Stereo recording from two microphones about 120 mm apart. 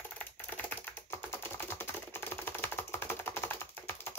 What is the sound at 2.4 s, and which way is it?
Typing, 15° left (ahead or behind).